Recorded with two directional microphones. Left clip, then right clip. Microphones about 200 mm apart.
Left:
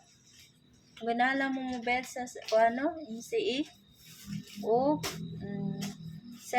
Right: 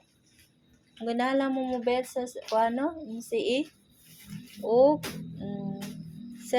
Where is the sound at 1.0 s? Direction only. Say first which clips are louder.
Right 1 dB; 15° right (ahead or behind).